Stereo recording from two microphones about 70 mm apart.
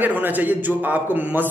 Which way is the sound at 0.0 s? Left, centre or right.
Right.